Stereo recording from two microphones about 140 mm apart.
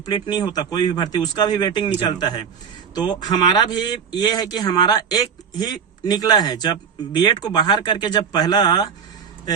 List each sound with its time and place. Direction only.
0.1 s a man's voice: 30° left (ahead or behind)